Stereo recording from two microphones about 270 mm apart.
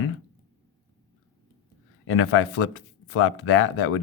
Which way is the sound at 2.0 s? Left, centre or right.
Left.